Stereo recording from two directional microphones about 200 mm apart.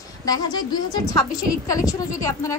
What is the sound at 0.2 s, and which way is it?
A woman's voice, 20° left (ahead or behind).